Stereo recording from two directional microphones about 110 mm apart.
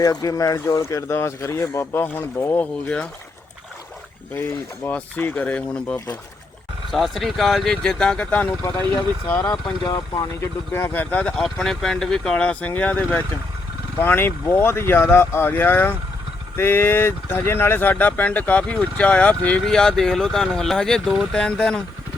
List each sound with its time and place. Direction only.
0.0 s speech: 35° left (ahead or behind); by 2.6 s 20° left (ahead or behind)
2.8 s speech: 10° left (ahead or behind)
4.4 s speech: 15° left (ahead or behind)
6.9 s speech: centre (ahead or behind); by 8.9 s 20° left (ahead or behind)
9.8 s speech: 35° left (ahead or behind)
10.4 s speech: 20° left (ahead or behind)